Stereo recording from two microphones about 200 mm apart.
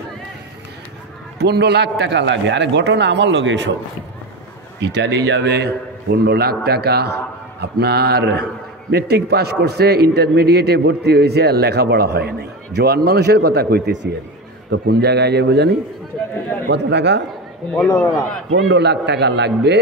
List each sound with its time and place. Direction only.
1.4 s a man's voice: 55° right (ahead or behind)
4.7 s a man's voice: 55° right (ahead or behind)
18.6 s a man's voice: 60° right (ahead or behind)